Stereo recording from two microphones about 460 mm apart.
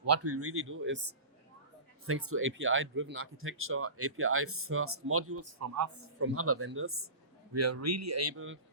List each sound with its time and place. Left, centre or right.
0.0 s speech: right
2.0 s speech: right